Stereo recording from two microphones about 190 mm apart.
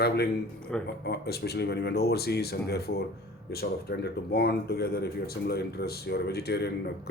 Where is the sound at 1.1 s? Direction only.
60° left (ahead or behind).